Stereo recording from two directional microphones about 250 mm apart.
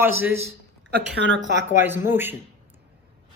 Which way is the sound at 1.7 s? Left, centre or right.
Centre.